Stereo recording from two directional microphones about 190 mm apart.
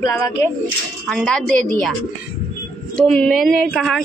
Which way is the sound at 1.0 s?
5° left (ahead or behind).